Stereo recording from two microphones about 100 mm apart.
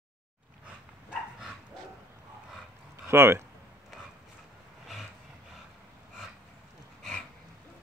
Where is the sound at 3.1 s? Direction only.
25° right (ahead or behind).